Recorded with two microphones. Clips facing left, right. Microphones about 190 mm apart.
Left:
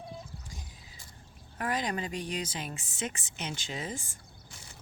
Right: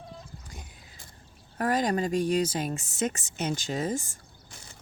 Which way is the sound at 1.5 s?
40° right (ahead or behind).